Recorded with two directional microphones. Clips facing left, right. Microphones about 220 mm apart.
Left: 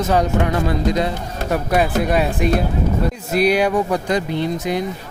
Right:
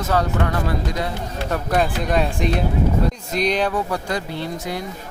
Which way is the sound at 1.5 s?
10° left (ahead or behind).